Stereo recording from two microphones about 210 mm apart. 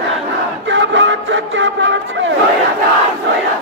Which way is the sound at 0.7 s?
60° right (ahead or behind).